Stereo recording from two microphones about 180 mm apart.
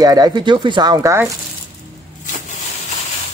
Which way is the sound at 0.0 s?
20° right (ahead or behind).